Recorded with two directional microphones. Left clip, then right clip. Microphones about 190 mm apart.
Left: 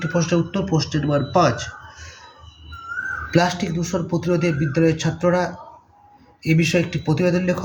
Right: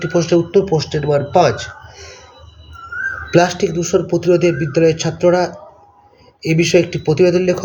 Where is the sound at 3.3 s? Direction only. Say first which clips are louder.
Right 7 dB; 15° right (ahead or behind).